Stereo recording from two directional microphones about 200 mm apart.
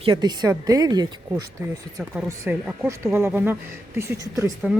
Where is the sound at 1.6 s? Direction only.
10° right (ahead or behind).